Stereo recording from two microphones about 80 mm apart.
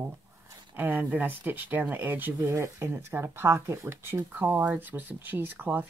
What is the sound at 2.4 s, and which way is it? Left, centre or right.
Speech, right.